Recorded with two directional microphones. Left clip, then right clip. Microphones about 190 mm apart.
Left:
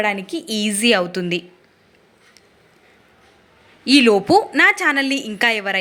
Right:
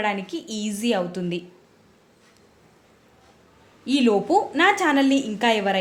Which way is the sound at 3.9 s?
20° left (ahead or behind).